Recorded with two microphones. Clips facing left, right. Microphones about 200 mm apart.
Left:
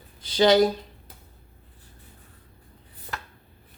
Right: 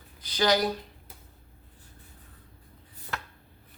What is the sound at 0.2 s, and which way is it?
Speech, 25° left (ahead or behind).